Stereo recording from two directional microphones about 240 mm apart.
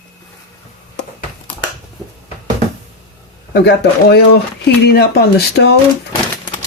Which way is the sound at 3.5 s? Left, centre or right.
Left.